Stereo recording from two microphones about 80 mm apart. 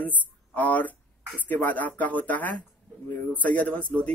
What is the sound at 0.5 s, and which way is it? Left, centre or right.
A man's voice, left.